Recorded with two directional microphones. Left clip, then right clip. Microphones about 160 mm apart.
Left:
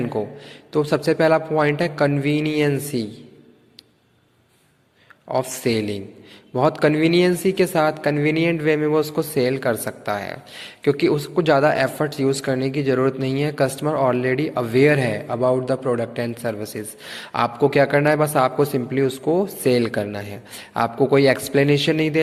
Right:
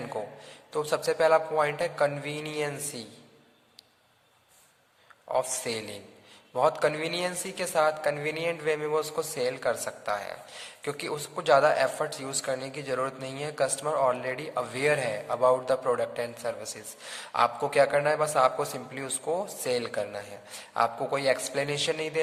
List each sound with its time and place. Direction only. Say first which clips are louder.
0.1 s a woman's voice: left 9 dB; 25° left (ahead or behind)
5.3 s a woman's voice: left 7 dB; 20° left (ahead or behind)
15.4 s a woman's voice: left 3 dB; 15° left (ahead or behind)